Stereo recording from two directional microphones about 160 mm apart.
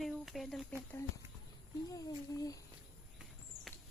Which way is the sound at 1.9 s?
20° left (ahead or behind).